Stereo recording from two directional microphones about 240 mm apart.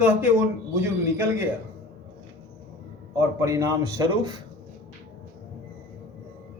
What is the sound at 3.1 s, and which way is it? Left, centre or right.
A man's voice, centre.